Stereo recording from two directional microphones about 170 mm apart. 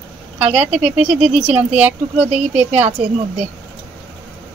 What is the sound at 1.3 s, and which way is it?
A woman's voice, 5° right (ahead or behind).